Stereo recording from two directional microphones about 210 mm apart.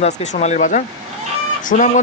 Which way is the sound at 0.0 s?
35° left (ahead or behind).